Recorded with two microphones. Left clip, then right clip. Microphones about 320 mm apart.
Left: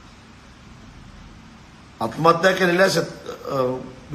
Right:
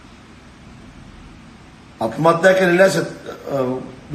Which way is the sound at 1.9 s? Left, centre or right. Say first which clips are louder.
Right 2 dB; centre.